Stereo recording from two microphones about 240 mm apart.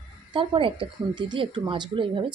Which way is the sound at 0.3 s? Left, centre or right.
Right.